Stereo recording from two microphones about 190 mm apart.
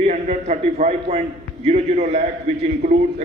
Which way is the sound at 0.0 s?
35° right (ahead or behind).